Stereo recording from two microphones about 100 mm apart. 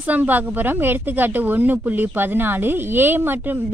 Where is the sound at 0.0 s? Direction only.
15° right (ahead or behind).